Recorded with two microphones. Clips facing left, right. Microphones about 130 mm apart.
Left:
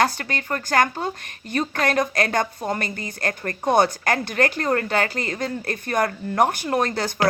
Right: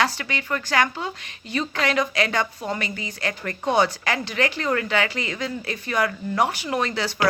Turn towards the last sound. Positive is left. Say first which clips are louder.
# left 2 dB
turn(degrees=50)  # may be behind; listen again after turning